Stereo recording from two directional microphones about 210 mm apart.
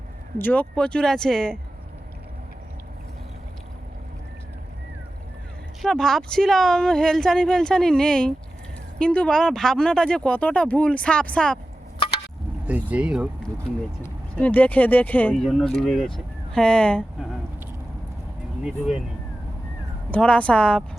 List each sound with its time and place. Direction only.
0.3 s speech: 10° left (ahead or behind)
5.8 s speech: centre (ahead or behind)
11.9 s a sound: 25° left (ahead or behind)
12.6 s speech: 5° right (ahead or behind)
14.0 s speech: 5° left (ahead or behind)
18.6 s speech: 5° right (ahead or behind)
20.1 s speech: 5° left (ahead or behind)